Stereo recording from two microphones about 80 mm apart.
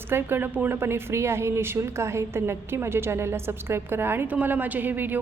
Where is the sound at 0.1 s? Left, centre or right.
Right.